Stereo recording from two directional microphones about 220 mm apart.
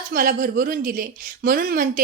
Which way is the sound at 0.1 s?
40° right (ahead or behind).